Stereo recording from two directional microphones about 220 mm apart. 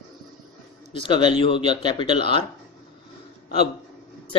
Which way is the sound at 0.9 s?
20° left (ahead or behind).